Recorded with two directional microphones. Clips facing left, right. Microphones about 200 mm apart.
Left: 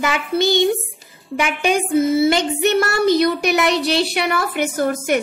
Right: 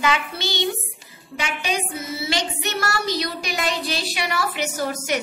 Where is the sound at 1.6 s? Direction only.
50° left (ahead or behind).